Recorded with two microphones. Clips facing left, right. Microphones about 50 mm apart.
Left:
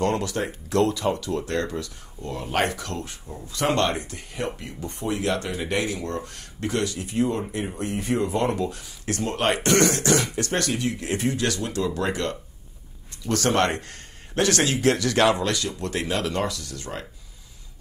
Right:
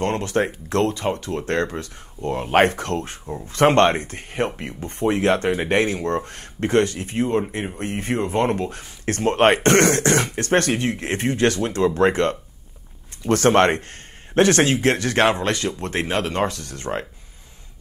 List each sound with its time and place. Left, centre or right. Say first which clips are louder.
0.0 s speech: right 3 dB; right